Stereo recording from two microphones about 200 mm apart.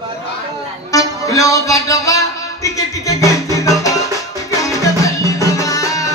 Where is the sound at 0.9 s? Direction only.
15° left (ahead or behind).